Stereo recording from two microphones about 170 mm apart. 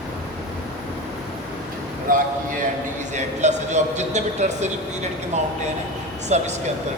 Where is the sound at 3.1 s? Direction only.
45° right (ahead or behind).